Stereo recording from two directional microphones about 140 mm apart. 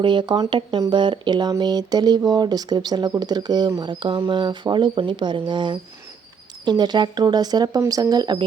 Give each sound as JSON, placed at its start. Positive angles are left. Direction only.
{"t": 0.0, "sound": "speech", "side_deg": -35}